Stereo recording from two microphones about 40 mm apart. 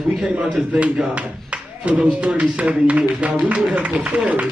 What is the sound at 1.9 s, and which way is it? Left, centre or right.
Speech, right.